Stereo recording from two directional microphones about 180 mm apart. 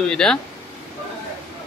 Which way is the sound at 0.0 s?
5° left (ahead or behind).